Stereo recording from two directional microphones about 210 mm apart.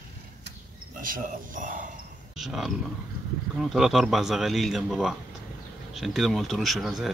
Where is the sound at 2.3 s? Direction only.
Centre (ahead or behind).